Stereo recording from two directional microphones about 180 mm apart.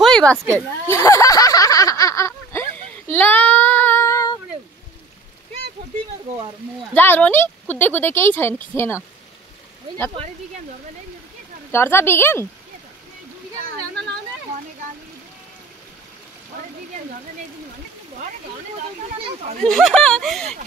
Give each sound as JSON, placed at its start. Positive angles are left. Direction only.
{"t": 0.0, "sound": "a sound", "side_deg": 5}
{"t": 3.1, "sound": "child singing", "side_deg": 10}
{"t": 6.9, "sound": "speech", "side_deg": 10}
{"t": 11.7, "sound": "speech", "side_deg": 15}
{"t": 16.5, "sound": "a sound", "side_deg": -50}
{"t": 19.7, "sound": "speech", "side_deg": 0}